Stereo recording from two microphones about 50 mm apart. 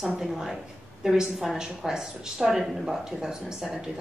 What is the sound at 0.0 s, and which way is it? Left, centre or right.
A woman's voice, centre.